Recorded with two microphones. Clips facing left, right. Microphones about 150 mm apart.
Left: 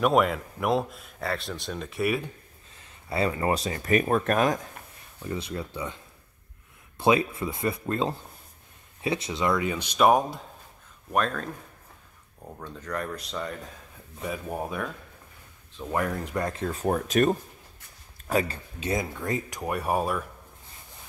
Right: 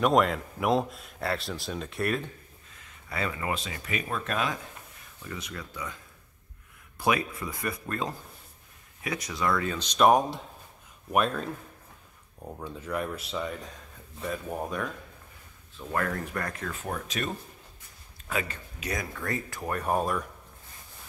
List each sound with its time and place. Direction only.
0.0 s speech: 5° left (ahead or behind)
2.8 s speech: 30° left (ahead or behind); by 4.6 s 45° left (ahead or behind)
5.2 s speech: 30° left (ahead or behind)
7.0 s speech: 25° left (ahead or behind)
9.9 s speech: centre (ahead or behind)
11.1 s speech: 10° right (ahead or behind)
15.7 s speech: 15° left (ahead or behind)
16.8 s speech: 45° left (ahead or behind); by 20.2 s 5° left (ahead or behind)